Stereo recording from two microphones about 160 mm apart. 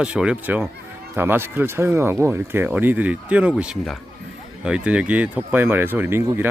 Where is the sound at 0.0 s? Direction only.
5° right (ahead or behind).